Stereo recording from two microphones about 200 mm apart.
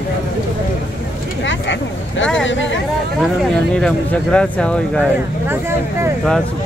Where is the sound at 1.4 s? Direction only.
65° left (ahead or behind).